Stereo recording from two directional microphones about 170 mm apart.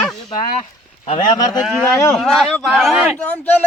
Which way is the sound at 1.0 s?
40° left (ahead or behind).